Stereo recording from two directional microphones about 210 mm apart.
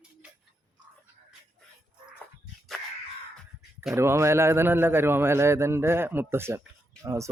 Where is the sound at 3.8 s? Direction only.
10° right (ahead or behind).